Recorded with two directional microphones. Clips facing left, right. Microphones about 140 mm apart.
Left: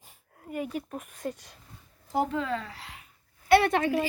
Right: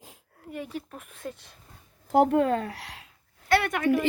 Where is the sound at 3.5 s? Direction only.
25° left (ahead or behind).